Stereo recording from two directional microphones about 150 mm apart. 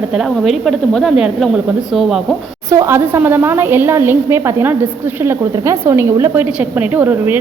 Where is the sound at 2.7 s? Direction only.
20° right (ahead or behind).